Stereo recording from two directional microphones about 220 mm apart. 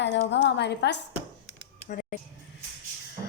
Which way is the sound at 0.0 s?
55° left (ahead or behind).